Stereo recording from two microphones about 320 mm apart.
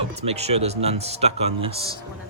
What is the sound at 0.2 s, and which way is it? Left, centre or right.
Speech, centre.